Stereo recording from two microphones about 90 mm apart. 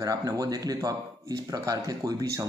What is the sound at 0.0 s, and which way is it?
Speech, 40° right (ahead or behind).